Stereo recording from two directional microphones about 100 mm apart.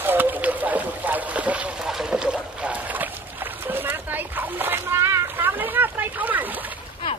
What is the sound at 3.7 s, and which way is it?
Splash, 20° right (ahead or behind).